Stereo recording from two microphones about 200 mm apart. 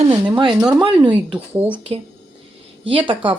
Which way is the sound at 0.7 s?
25° right (ahead or behind).